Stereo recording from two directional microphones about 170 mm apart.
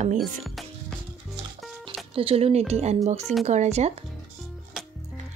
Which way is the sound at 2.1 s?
35° right (ahead or behind).